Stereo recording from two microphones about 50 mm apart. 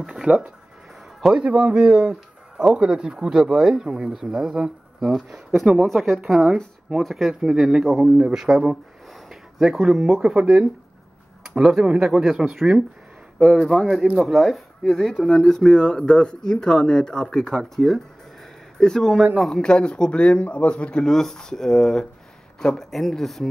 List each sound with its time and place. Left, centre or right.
0.0 s speech: centre
14.8 s speech: centre
15.9 s speech: centre
17.7 s a sound: centre
19.5 s speech: centre